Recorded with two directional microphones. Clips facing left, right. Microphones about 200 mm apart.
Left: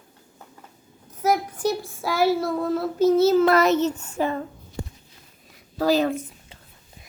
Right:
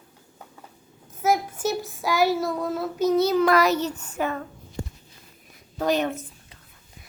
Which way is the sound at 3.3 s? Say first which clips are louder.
Left 2 dB; 25° left (ahead or behind).